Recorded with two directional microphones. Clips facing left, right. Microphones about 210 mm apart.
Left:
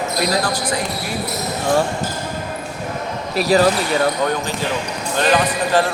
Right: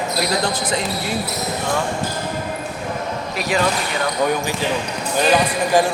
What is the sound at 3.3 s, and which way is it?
Speech, 35° left (ahead or behind).